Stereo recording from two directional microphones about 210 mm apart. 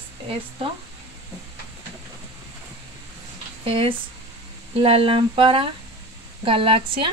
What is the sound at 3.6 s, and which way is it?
Speech, 25° right (ahead or behind).